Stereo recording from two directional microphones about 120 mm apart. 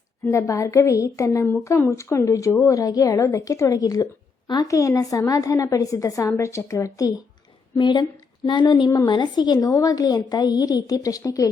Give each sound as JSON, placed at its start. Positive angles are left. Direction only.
{"t": 0.3, "sound": "a woman's voice", "side_deg": 25}